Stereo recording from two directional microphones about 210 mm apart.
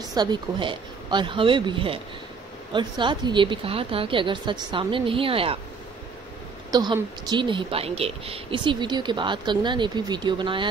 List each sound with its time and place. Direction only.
0.1 s a woman's voice: 20° right (ahead or behind)
6.7 s a woman's voice: 20° right (ahead or behind)